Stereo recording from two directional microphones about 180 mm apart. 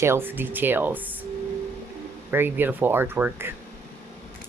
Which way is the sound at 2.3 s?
10° right (ahead or behind).